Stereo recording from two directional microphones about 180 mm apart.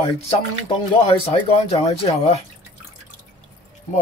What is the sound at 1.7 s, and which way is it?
Speech, 35° left (ahead or behind).